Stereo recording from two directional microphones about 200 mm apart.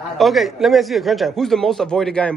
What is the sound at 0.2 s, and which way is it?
A man's voice, centre (ahead or behind).